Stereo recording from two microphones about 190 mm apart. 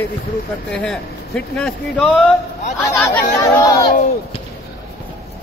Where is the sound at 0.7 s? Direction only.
5° left (ahead or behind).